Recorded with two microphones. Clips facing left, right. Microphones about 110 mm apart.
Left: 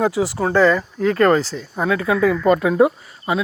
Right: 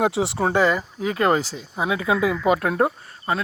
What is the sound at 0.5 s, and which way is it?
Speech, 15° right (ahead or behind).